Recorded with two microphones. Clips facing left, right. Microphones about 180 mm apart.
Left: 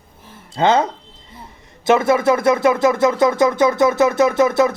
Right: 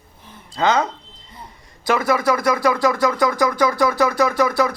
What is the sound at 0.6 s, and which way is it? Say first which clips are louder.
Speech: left 3 dB; 25° left (ahead or behind).